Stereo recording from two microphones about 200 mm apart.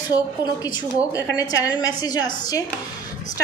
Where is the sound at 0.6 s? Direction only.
20° left (ahead or behind).